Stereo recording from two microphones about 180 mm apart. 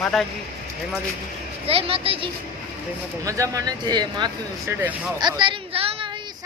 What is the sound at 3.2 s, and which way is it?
Speech, 20° right (ahead or behind).